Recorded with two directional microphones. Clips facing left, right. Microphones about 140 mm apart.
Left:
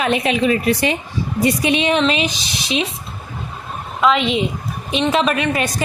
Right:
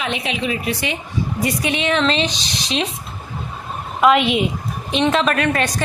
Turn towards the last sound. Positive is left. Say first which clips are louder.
# even
turn(degrees=5)  # may be behind; listen again after turning